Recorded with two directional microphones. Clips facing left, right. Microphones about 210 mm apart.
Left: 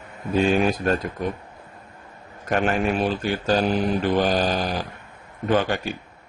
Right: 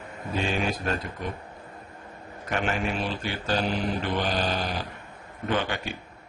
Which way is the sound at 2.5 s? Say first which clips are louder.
Left 6 dB; 50° left (ahead or behind).